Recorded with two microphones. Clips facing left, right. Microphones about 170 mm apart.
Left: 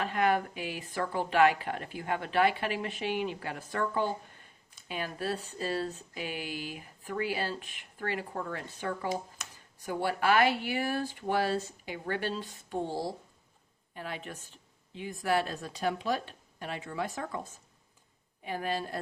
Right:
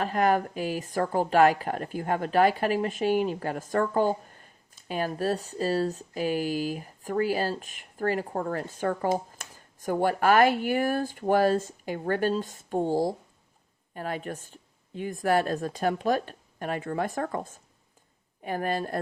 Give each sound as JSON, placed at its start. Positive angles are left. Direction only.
{"t": 0.0, "sound": "speech", "side_deg": -40}